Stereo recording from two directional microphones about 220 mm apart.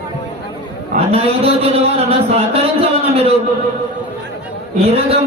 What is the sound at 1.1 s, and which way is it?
A man's voice, 25° right (ahead or behind).